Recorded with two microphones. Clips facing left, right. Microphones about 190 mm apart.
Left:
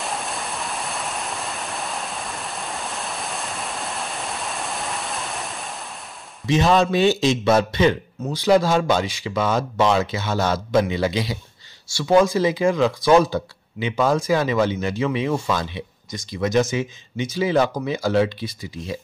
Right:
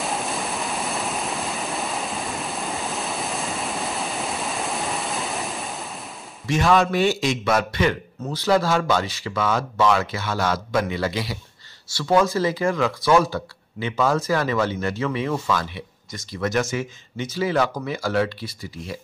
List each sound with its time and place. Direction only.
0.0 s waterfall: centre (ahead or behind)
6.4 s a man's voice: 20° left (ahead or behind)